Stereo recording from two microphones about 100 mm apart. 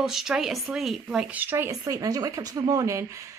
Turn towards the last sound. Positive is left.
turn(degrees=-30)  # may be behind; listen again after turning